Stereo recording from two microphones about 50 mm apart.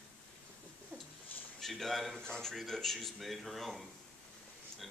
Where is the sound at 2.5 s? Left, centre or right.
Centre.